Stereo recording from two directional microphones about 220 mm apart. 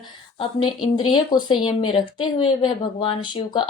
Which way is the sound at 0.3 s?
20° left (ahead or behind).